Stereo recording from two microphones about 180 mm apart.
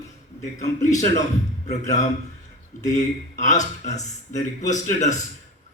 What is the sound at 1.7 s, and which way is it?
A man's voice, 40° left (ahead or behind).